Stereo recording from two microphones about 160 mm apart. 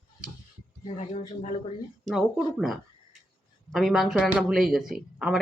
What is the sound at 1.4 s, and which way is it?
Speech, 40° left (ahead or behind).